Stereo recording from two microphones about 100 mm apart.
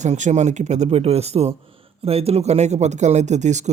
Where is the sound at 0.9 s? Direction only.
90° right.